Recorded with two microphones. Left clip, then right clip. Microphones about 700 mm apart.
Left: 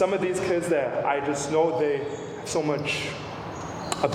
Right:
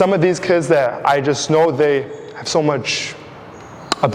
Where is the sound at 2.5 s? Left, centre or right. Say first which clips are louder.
Right 9 dB; right.